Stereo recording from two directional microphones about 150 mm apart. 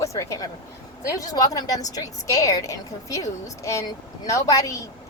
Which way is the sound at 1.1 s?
25° left (ahead or behind).